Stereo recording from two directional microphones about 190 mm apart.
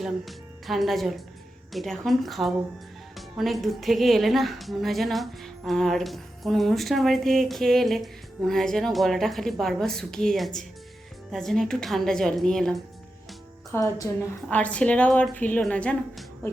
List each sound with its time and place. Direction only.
0.0 s a woman's voice: centre (ahead or behind)
13.7 s a woman's voice: 15° left (ahead or behind)